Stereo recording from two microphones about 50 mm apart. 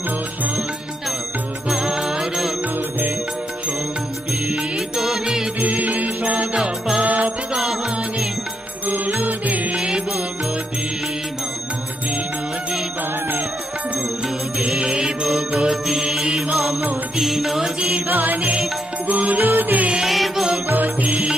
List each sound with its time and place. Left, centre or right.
1.7 s music: centre
4.5 s music: centre
5.8 s mantra: right
6.5 s music: centre
7.0 s music: right
9.1 s music: right
9.8 s music: centre
14.7 s music: centre
15.2 s mantra: centre
17.2 s music: centre
18.0 s music: right
20.1 s music: centre
20.6 s music: right
21.1 s music: centre